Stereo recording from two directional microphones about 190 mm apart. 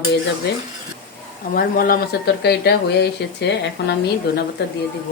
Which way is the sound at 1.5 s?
50° left (ahead or behind).